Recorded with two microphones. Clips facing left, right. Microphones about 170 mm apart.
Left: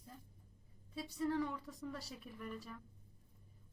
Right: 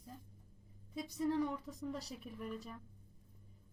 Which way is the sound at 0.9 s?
15° right (ahead or behind).